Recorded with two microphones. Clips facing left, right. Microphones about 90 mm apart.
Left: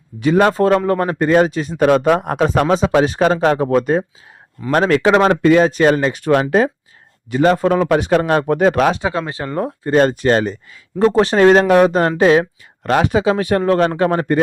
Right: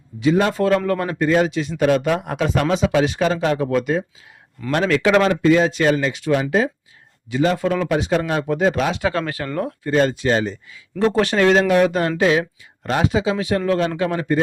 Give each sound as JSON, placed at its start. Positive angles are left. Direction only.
{"t": 0.2, "sound": "speech", "side_deg": 55}
{"t": 0.5, "sound": "a man's voice", "side_deg": 35}
{"t": 5.5, "sound": "speech", "side_deg": 50}
{"t": 7.9, "sound": "speech", "side_deg": 55}
{"t": 9.0, "sound": "speech", "side_deg": 20}
{"t": 9.9, "sound": "speech", "side_deg": 45}
{"t": 10.9, "sound": "a man's voice", "side_deg": 30}
{"t": 12.8, "sound": "speech", "side_deg": 65}